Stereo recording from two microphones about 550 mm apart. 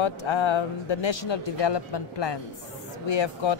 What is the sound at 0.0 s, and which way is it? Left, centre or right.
A man's voice, left.